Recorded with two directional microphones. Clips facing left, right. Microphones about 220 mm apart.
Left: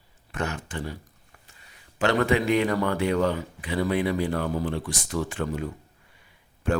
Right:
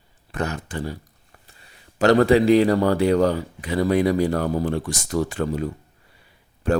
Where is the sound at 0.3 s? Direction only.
35° right (ahead or behind).